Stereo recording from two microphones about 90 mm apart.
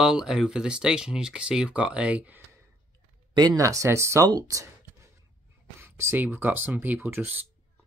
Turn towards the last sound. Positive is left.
turn(degrees=-20)  # may be behind; listen again after turning